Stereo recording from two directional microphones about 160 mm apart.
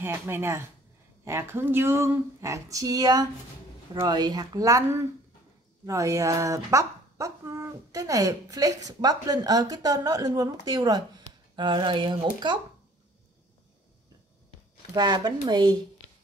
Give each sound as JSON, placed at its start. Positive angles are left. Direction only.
{"t": 0.0, "sound": "speech", "side_deg": -15}
{"t": 5.9, "sound": "speech", "side_deg": -20}
{"t": 15.0, "sound": "speech", "side_deg": -25}